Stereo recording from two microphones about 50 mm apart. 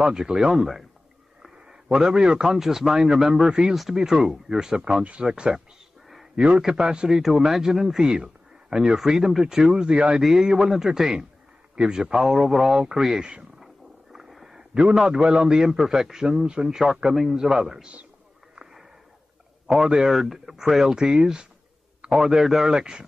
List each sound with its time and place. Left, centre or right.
0.0 s a man's voice: centre
3.7 s speech: centre
4.0 s a man's voice: centre
10.2 s a man's voice: centre
11.7 s a man's voice: right
12.0 s a man's voice: centre
14.1 s a sound: centre
15.0 s a man's voice: centre
18.5 s a sound: centre
20.0 s a man's voice: centre